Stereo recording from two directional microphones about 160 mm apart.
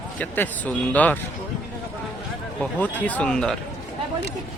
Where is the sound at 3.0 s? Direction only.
10° left (ahead or behind).